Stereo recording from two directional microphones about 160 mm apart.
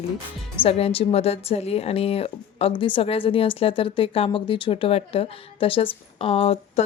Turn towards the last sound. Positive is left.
turn(degrees=35)  # may be behind; listen again after turning